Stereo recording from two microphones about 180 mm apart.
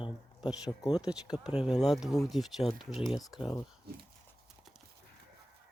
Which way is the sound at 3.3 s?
25° left (ahead or behind).